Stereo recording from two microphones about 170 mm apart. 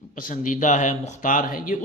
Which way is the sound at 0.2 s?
50° left (ahead or behind).